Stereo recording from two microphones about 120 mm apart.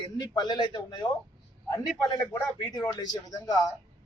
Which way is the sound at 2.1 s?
30° left (ahead or behind).